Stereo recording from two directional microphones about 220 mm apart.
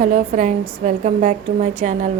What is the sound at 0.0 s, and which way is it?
A woman's voice, 35° right (ahead or behind).